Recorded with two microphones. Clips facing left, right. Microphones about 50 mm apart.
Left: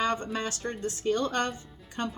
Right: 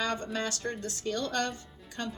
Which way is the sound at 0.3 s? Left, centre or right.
Left.